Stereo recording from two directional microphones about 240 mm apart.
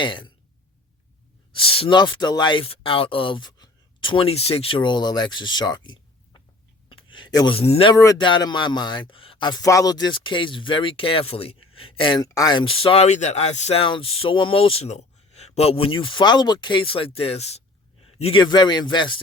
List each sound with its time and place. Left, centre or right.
0.0 s speech: centre
1.5 s speech: left